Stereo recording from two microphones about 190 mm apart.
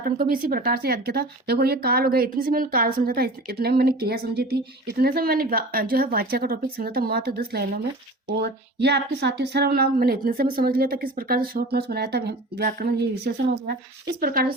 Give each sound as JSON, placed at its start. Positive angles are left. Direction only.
{"t": 0.0, "sound": "speech", "side_deg": -50}
{"t": 14.2, "sound": "speech", "side_deg": -50}